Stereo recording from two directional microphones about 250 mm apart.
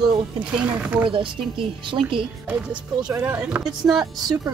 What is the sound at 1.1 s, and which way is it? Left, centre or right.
A woman's voice, centre.